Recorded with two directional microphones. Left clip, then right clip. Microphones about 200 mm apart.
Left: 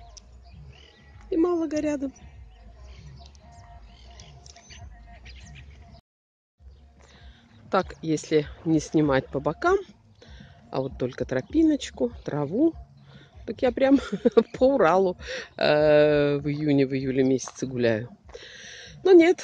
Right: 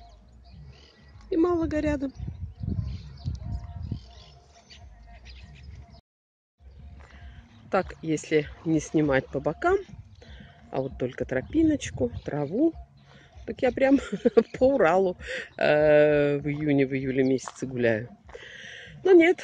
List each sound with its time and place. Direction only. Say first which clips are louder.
1.3 s speech: even; centre (ahead or behind)
3.9 s a sound: right 10 dB; 25° right (ahead or behind)
7.7 s speech: left 2 dB; 5° left (ahead or behind)